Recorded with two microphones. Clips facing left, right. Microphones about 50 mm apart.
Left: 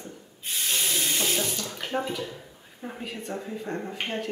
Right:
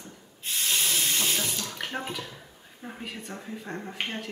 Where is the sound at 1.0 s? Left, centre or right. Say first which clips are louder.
Left 1 dB; left.